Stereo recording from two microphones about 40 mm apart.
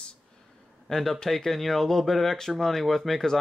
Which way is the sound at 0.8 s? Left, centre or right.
Centre.